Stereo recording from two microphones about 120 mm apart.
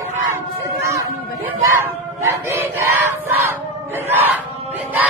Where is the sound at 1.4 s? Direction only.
20° right (ahead or behind).